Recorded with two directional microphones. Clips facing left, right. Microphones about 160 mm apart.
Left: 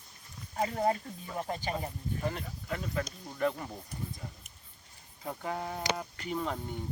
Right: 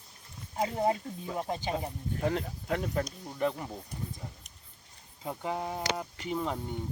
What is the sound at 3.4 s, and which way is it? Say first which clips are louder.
Speech: even; 15° right (ahead or behind).